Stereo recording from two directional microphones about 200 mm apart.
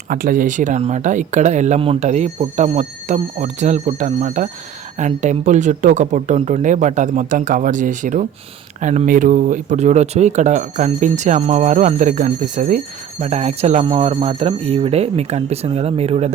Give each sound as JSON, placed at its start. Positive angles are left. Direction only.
{"t": 0.1, "sound": "speech", "side_deg": -45}